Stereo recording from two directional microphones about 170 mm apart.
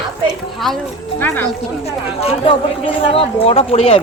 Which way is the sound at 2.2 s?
35° left (ahead or behind).